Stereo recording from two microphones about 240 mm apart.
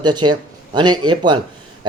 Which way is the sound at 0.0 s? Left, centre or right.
Centre.